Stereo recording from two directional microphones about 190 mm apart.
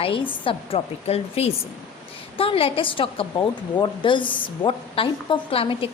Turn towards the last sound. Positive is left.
turn(degrees=30)  # may be behind; listen again after turning